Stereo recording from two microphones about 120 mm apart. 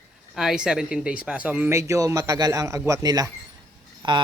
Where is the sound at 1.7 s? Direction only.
25° right (ahead or behind).